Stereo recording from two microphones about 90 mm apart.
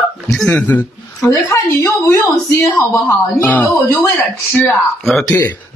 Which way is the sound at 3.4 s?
15° left (ahead or behind).